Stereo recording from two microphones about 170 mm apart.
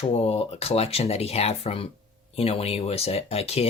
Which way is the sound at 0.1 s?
35° left (ahead or behind).